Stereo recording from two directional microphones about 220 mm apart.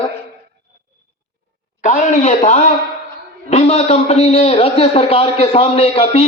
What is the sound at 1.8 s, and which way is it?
A man's voice, 35° left (ahead or behind).